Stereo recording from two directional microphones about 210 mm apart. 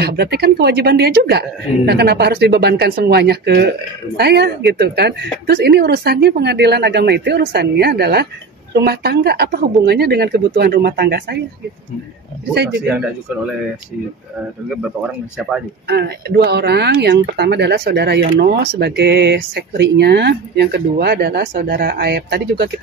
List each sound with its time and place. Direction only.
0.0 s speech: 50° right (ahead or behind)
12.5 s speech: 55° right (ahead or behind)
15.9 s speech: 50° right (ahead or behind)